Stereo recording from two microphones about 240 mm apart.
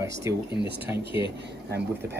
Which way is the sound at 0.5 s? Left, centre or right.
Right.